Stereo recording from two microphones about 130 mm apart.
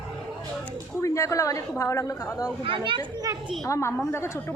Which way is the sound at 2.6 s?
40° right (ahead or behind).